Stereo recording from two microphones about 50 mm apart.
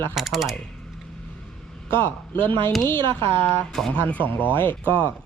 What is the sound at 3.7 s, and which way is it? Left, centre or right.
Speech, centre.